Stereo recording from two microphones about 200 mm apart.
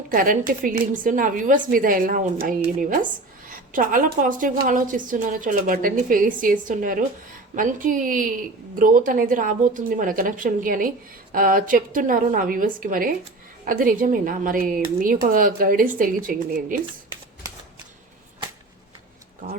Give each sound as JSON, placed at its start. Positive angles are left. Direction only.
{"t": 0.1, "sound": "a woman's voice", "side_deg": -45}